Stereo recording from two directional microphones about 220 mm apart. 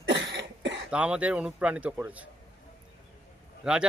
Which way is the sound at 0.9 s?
5° right (ahead or behind).